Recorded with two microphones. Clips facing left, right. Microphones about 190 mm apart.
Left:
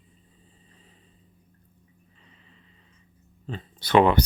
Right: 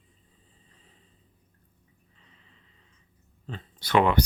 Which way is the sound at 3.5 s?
25° left (ahead or behind).